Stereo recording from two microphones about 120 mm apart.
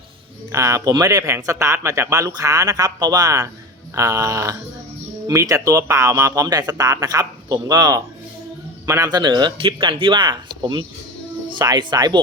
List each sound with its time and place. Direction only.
0.5 s speech: 25° right (ahead or behind)
9.0 s speech: 35° right (ahead or behind)